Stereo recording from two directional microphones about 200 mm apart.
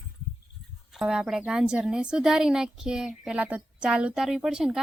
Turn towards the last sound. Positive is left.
turn(degrees=0)  # may be behind; listen again after turning